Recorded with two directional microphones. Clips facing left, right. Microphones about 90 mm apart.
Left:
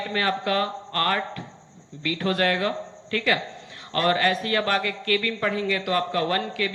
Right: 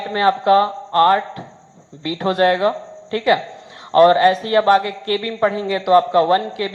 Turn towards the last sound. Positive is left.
turn(degrees=-30)  # may be behind; listen again after turning